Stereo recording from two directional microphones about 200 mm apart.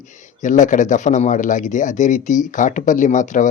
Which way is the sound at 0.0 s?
40° left (ahead or behind).